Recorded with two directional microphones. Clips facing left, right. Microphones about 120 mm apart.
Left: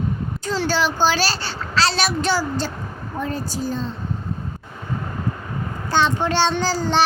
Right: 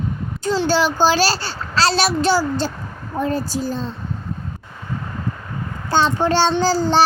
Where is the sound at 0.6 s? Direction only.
30° right (ahead or behind).